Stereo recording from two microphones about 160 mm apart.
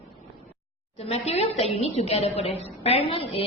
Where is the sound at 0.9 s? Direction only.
40° left (ahead or behind).